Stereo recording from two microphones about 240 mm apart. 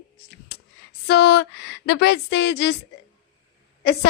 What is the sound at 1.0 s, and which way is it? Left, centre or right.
A woman's voice, left.